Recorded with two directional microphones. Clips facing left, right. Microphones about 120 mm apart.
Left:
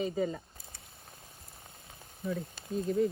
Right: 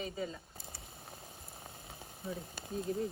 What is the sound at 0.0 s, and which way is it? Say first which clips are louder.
Speech: left 8 dB; 45° left (ahead or behind).